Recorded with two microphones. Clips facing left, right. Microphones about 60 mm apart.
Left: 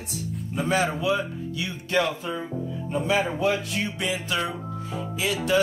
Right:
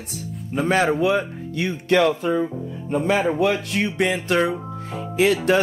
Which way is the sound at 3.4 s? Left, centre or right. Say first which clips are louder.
Right 4 dB; right.